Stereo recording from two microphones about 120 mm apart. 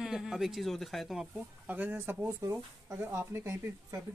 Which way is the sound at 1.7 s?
15° right (ahead or behind).